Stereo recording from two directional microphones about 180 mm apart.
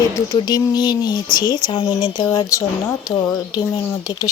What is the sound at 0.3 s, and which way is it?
Speech, 20° left (ahead or behind).